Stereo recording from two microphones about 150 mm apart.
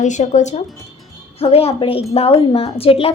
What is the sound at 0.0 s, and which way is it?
Child singing, 55° left (ahead or behind).